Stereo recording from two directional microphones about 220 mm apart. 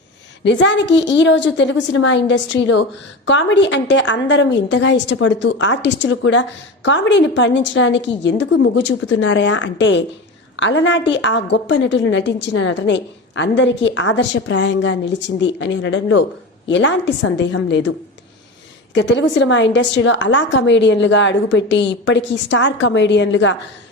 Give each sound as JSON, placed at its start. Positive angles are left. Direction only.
{"t": 0.4, "sound": "a woman's voice", "side_deg": 55}
{"t": 18.9, "sound": "a woman's voice", "side_deg": 55}